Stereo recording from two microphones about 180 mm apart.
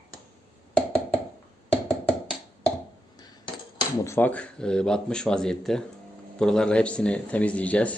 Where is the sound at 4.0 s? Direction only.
15° left (ahead or behind).